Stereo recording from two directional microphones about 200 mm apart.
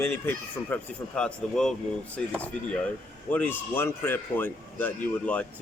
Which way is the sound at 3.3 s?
10° left (ahead or behind).